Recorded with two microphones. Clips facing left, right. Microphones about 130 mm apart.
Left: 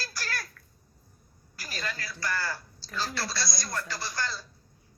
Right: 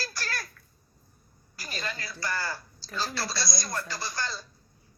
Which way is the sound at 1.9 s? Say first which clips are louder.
Left 1 dB; 20° right (ahead or behind).